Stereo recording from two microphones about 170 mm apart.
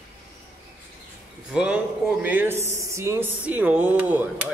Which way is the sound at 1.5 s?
5° right (ahead or behind).